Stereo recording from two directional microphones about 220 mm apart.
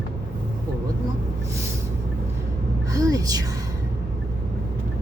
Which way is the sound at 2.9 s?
15° right (ahead or behind).